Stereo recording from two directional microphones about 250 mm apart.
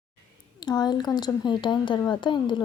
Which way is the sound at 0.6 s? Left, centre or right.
Centre.